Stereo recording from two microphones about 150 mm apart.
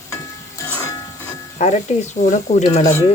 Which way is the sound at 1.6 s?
50° left (ahead or behind).